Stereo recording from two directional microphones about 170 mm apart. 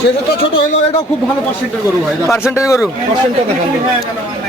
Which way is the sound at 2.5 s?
15° left (ahead or behind).